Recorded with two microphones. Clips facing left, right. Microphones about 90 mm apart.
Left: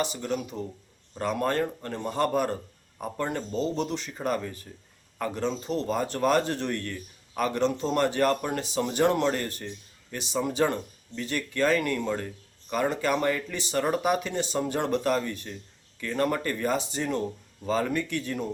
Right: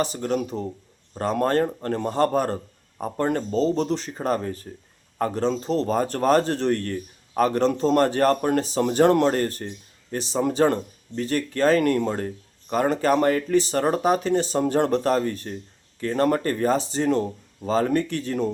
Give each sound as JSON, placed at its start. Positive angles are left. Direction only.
{"t": 0.0, "sound": "speech", "side_deg": -40}